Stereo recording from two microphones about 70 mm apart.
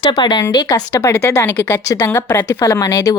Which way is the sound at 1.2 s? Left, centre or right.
Left.